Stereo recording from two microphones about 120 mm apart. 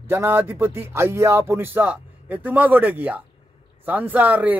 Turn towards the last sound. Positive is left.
turn(degrees=-15)  # may be behind; listen again after turning